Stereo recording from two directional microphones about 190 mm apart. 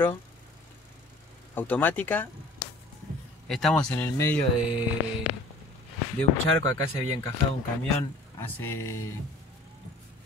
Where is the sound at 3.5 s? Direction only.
Centre (ahead or behind).